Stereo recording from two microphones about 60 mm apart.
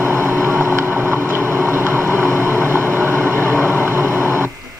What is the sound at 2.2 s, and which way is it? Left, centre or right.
Train, right.